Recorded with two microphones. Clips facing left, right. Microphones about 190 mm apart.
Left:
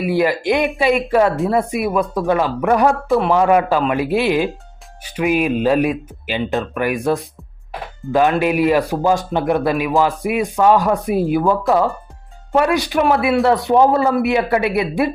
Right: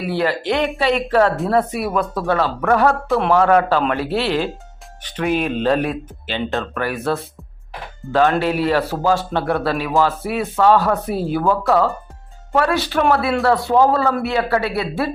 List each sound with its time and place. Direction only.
0.0 s speech: 10° left (ahead or behind)
6.4 s speech: centre (ahead or behind)
6.7 s a man's voice: 15° left (ahead or behind)